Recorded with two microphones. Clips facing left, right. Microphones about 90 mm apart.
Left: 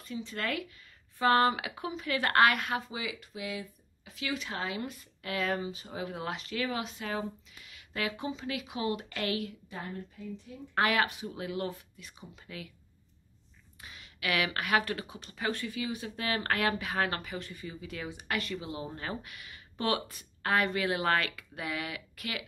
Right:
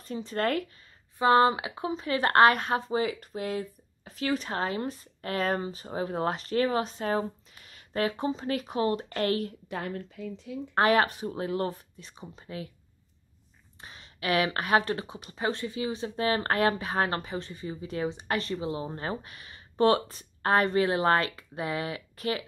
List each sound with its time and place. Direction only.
0.0 s speech: 40° right (ahead or behind)
1.1 s speech: 20° right (ahead or behind); by 9.6 s 45° right (ahead or behind)
9.7 s a woman's voice: 80° right
10.7 s speech: 35° right (ahead or behind)
13.7 s speech: 35° right (ahead or behind)